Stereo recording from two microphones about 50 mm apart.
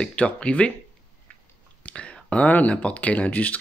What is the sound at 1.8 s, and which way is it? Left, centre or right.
Speech, left.